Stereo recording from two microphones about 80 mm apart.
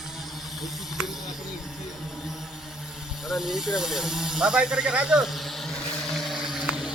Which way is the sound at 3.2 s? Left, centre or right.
Centre.